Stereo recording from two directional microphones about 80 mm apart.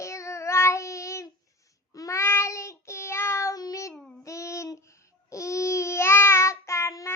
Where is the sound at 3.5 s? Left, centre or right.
Left.